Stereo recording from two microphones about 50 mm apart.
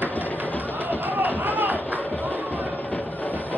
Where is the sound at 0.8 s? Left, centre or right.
Right.